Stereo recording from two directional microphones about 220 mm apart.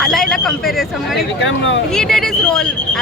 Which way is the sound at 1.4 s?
55° left (ahead or behind).